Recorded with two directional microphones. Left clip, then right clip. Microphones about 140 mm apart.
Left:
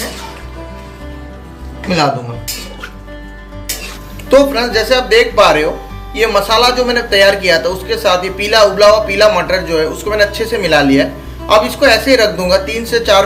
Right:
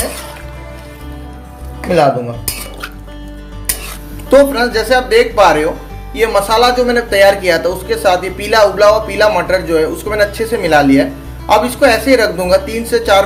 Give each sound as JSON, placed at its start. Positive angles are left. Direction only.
{"t": 4.3, "sound": "speech", "side_deg": -40}